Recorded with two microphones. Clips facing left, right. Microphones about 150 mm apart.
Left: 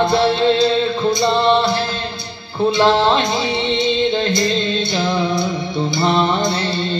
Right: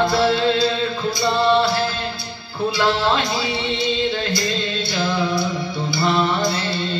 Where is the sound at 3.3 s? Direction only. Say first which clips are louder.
Left 4 dB; 20° left (ahead or behind).